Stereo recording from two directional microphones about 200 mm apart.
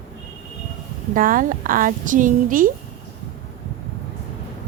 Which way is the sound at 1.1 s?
45° right (ahead or behind).